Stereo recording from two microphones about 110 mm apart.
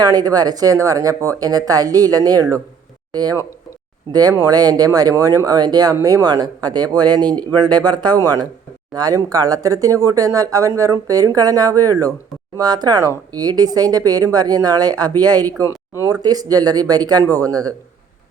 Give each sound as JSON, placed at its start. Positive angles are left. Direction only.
{"t": 0.0, "sound": "speech", "side_deg": -35}
{"t": 15.7, "sound": "a sound", "side_deg": 30}
{"t": 16.2, "sound": "speech", "side_deg": -35}